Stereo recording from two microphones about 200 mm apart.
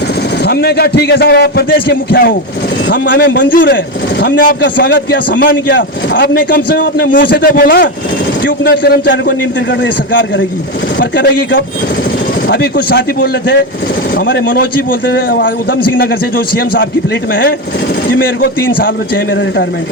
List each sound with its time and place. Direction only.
0.4 s a man's voice: 55° left (ahead or behind)
3.3 s a man's voice: 45° left (ahead or behind)
5.7 s a man's voice: 60° left (ahead or behind)
12.5 s a man's voice: 55° left (ahead or behind)
14.3 s a man's voice: 50° left (ahead or behind)
18.1 s a man's voice: 50° left (ahead or behind)